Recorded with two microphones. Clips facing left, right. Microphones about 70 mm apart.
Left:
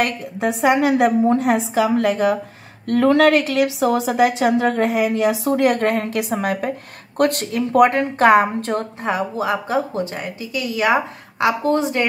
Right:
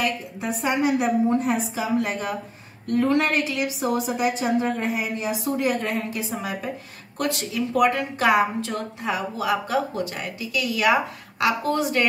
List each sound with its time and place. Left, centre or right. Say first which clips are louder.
0.0 s a woman's voice: left 6 dB; left
7.2 s a woman's voice: left 7 dB; left